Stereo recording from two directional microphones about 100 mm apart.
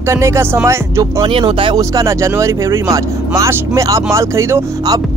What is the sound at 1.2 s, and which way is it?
Speech, 60° right (ahead or behind).